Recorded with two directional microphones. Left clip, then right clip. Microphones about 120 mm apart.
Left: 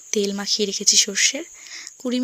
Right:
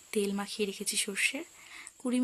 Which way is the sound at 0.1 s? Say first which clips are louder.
Left 11 dB; 40° left (ahead or behind).